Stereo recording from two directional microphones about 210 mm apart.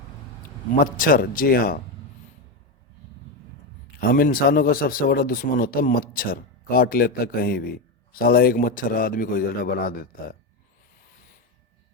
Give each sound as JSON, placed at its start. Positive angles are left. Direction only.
{"t": 0.8, "sound": "speech", "side_deg": 40}
{"t": 4.0, "sound": "speech", "side_deg": 45}